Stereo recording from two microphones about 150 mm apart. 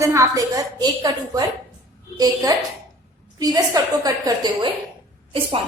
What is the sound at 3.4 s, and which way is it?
A woman's voice, 25° right (ahead or behind).